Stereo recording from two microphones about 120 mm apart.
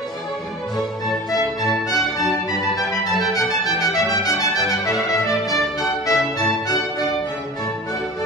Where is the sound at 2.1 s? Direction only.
30° left (ahead or behind).